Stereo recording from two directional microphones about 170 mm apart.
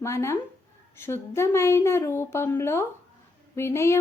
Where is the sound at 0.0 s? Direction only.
15° left (ahead or behind).